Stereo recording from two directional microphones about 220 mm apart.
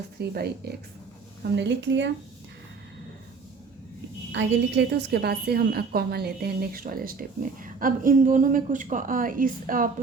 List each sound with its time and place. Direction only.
0.2 s speech: 45° right (ahead or behind)
1.5 s speech: 50° right (ahead or behind)
4.3 s a woman's voice: 55° right (ahead or behind); by 9.9 s 40° right (ahead or behind)